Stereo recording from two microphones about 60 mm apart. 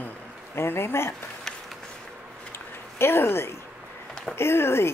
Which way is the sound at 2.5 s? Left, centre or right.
Left.